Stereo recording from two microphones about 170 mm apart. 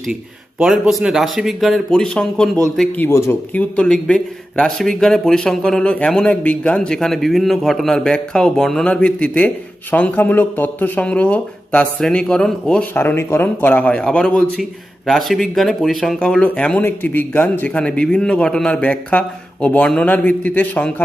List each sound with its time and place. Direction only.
0.6 s a man's voice: centre (ahead or behind)
3.1 s a man's voice: 15° left (ahead or behind)